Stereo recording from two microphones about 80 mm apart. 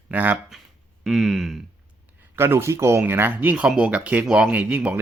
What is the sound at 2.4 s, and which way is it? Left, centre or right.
Speech, right.